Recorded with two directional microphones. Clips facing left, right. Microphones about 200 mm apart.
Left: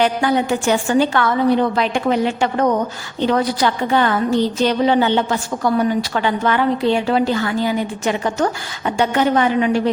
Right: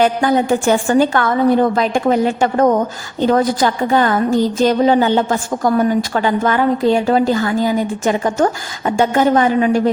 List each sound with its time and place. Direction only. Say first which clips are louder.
0.0 s a woman's voice: right 3 dB; 45° right (ahead or behind)